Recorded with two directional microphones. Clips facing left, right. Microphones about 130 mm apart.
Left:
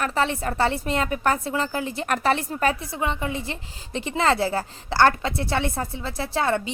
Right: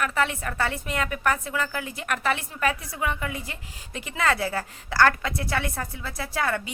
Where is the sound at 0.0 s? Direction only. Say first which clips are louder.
Left 2 dB; 30° left (ahead or behind).